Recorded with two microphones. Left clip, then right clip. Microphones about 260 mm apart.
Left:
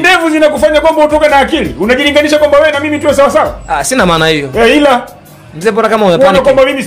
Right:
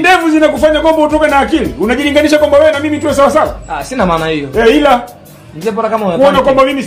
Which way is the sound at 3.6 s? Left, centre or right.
Left.